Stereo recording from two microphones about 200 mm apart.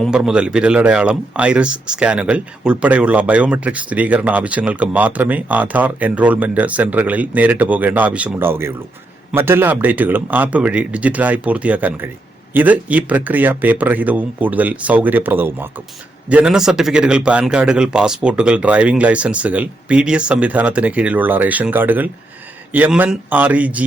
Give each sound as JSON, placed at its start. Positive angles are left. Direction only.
{"t": 0.0, "sound": "speech", "side_deg": -5}